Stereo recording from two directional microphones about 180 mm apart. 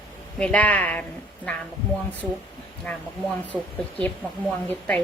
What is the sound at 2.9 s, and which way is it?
A woman's voice, 5° left (ahead or behind).